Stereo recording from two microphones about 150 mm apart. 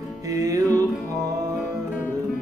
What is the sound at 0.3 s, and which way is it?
Music, 25° right (ahead or behind).